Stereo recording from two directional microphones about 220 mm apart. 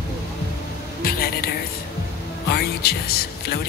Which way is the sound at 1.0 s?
45° left (ahead or behind).